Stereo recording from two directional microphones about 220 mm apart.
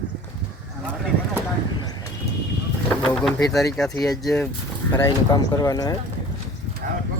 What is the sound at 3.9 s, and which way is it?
Speech, 15° left (ahead or behind).